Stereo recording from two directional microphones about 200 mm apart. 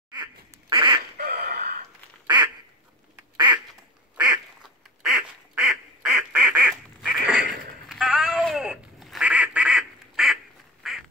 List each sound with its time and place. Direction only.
0.1 s duck: 25° right (ahead or behind)
1.1 s duck: 50° right (ahead or behind)
2.2 s quack: 20° right (ahead or behind)
5.0 s quack: 5° right (ahead or behind)
7.9 s duck: 5° right (ahead or behind)